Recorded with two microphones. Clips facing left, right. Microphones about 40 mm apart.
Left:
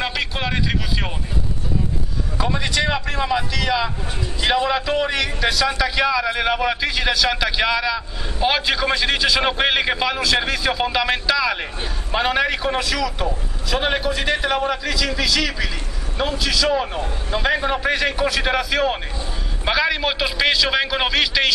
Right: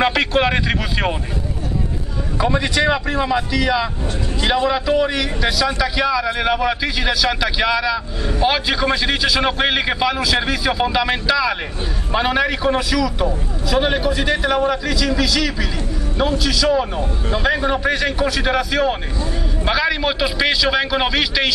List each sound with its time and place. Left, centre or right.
0.0 s speech: right
2.3 s a man's voice: centre